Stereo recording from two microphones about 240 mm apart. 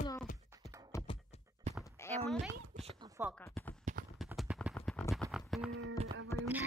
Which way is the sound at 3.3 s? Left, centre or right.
Centre.